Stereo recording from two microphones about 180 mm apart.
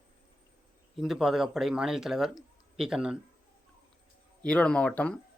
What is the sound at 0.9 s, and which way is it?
Speech, centre (ahead or behind).